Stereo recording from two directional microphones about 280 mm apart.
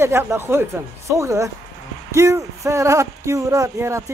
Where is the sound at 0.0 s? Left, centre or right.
Centre.